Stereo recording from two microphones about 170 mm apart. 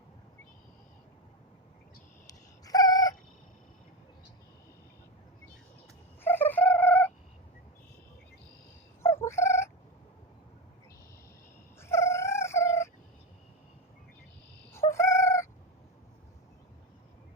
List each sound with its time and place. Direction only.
2.2 s cat: 20° left (ahead or behind)
6.2 s cat: 10° left (ahead or behind)
9.0 s cat: 15° left (ahead or behind)
11.8 s dog: 15° left (ahead or behind)
14.7 s cat: 15° left (ahead or behind)